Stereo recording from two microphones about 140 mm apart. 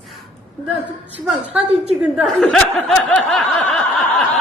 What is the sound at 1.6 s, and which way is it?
Speech, 45° right (ahead or behind).